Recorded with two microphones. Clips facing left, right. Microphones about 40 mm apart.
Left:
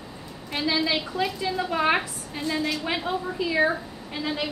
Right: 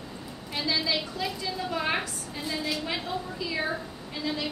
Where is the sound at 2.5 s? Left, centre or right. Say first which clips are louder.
Left 4 dB; centre.